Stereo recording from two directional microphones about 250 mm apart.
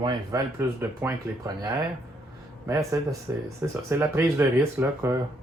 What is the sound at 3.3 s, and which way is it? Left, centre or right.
Speech, centre.